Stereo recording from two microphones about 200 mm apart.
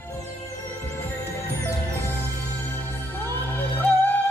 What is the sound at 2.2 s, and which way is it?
Music, 10° left (ahead or behind).